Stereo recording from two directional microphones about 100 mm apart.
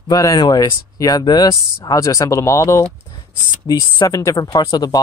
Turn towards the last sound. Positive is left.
turn(degrees=40)  # may be behind; listen again after turning